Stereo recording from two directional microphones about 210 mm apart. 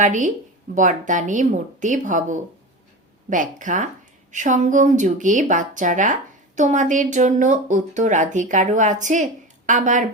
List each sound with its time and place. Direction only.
0.0 s speech: 35° right (ahead or behind)